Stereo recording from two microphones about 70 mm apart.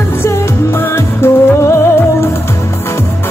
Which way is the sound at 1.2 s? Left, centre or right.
Left.